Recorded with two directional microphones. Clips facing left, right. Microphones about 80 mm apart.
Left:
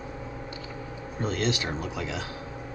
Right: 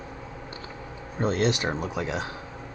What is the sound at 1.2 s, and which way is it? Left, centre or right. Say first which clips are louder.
Speech: right 4 dB; right.